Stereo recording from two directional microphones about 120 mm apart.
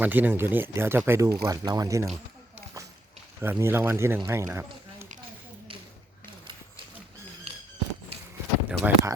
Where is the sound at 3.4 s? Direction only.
20° right (ahead or behind).